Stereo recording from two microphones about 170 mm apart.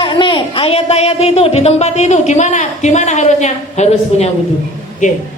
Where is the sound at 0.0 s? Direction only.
30° left (ahead or behind).